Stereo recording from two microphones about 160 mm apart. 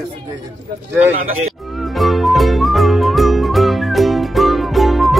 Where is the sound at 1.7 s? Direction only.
Centre (ahead or behind).